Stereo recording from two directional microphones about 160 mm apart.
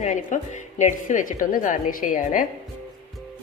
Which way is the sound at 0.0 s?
50° left (ahead or behind).